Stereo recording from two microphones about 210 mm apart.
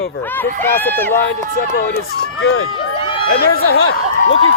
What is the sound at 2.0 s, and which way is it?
Speech, 70° left (ahead or behind).